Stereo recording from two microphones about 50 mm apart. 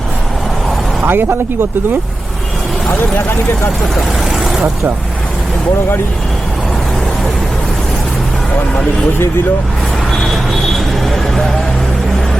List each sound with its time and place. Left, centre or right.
1.0 s speech: right